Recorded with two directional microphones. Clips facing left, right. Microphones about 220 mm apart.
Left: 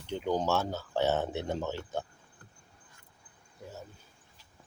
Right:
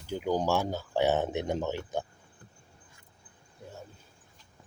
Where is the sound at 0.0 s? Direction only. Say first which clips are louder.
Right 1 dB; 5° right (ahead or behind).